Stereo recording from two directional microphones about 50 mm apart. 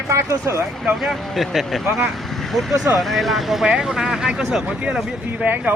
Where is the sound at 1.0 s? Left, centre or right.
Centre.